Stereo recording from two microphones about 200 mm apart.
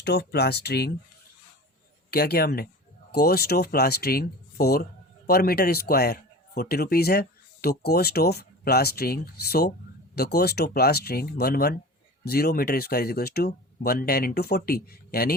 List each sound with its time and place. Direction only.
0.0 s speech: 55° left (ahead or behind)
2.0 s speech: 50° left (ahead or behind)